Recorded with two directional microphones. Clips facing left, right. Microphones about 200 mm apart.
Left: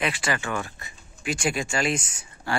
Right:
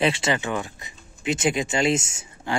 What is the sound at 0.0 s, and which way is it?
Speech, 25° right (ahead or behind).